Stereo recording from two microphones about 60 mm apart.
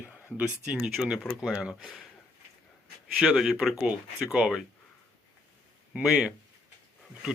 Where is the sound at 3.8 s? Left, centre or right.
Right.